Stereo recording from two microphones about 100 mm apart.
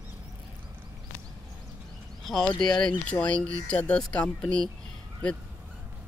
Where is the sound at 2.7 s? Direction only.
45° left (ahead or behind).